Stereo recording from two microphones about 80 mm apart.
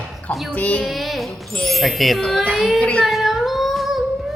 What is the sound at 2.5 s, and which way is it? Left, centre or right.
Child singing, centre.